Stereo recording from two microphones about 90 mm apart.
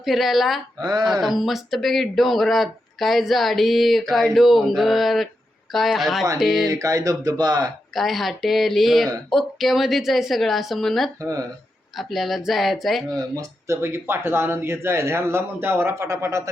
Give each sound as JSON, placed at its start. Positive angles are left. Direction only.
{"t": 0.0, "sound": "speech", "side_deg": 0}
{"t": 0.8, "sound": "speech", "side_deg": -50}
{"t": 1.2, "sound": "speech", "side_deg": 0}
{"t": 6.7, "sound": "speech", "side_deg": -40}
{"t": 7.9, "sound": "speech", "side_deg": 0}
{"t": 11.2, "sound": "speech", "side_deg": -40}
{"t": 11.9, "sound": "speech", "side_deg": 0}
{"t": 13.1, "sound": "speech", "side_deg": -45}
{"t": 13.8, "sound": "a man's voice", "side_deg": -25}